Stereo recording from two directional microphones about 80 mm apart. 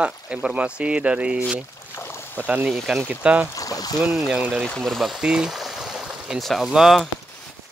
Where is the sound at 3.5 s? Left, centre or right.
Left.